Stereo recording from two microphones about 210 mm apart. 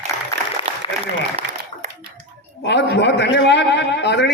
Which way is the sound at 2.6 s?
55° left (ahead or behind).